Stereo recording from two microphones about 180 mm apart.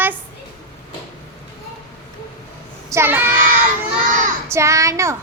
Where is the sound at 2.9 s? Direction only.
15° right (ahead or behind).